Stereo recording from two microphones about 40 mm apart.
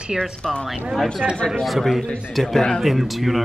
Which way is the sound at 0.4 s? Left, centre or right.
Left.